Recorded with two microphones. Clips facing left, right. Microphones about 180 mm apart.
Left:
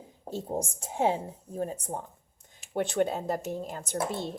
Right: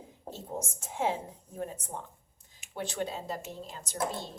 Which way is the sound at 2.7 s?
55° left (ahead or behind).